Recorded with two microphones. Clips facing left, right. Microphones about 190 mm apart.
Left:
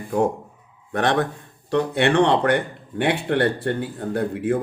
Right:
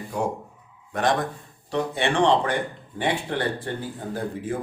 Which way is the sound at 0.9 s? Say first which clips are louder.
Left 3 dB; 65° left (ahead or behind).